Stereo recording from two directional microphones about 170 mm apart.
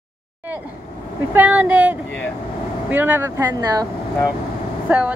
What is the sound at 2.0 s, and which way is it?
Speech, 10° left (ahead or behind).